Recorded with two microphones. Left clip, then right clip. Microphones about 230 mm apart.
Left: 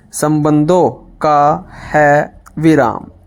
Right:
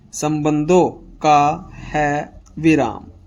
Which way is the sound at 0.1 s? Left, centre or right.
Left.